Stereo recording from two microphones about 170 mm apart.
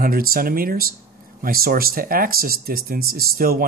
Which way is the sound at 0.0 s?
60° right (ahead or behind).